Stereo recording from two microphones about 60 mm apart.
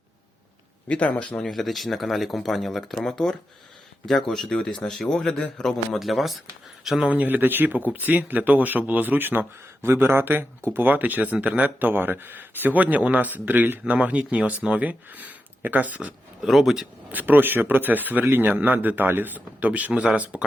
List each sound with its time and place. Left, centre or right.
0.9 s speech: left
1.5 s a man's voice: centre
6.0 s speech: centre
7.0 s speech: right
16.4 s speech: centre
17.1 s speech: right